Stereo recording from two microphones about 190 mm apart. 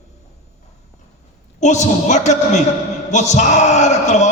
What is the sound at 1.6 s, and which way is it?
A man's voice, 40° left (ahead or behind).